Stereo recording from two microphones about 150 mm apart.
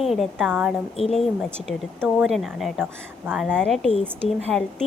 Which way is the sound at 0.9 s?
40° left (ahead or behind).